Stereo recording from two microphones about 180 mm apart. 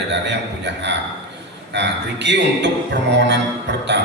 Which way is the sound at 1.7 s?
75° right (ahead or behind).